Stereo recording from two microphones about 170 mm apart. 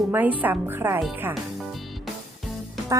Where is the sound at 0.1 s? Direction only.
10° right (ahead or behind).